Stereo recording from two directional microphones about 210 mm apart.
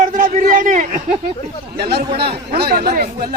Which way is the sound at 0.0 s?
40° right (ahead or behind).